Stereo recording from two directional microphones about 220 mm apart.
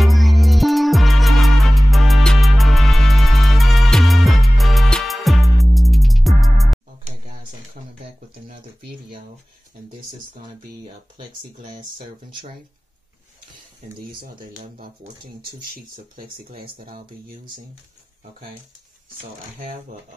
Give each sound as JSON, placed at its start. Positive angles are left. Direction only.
{"t": 0.0, "sound": "music", "side_deg": 0}
{"t": 11.8, "sound": "speech", "side_deg": -20}
{"t": 14.4, "sound": "speech", "side_deg": -40}
{"t": 16.2, "sound": "speech", "side_deg": -40}